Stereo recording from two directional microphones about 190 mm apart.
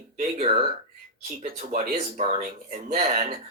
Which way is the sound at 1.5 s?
45° right (ahead or behind).